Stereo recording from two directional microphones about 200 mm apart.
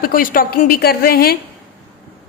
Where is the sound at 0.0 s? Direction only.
45° left (ahead or behind).